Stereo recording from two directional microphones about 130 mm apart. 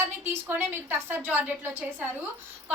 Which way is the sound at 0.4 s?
15° right (ahead or behind).